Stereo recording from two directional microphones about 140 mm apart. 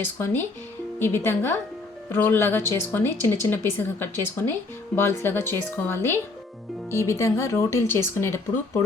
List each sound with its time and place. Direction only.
0.0 s speech: 15° left (ahead or behind)